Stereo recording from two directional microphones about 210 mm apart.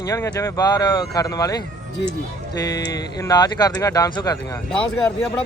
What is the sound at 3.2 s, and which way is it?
Speech, 20° left (ahead or behind).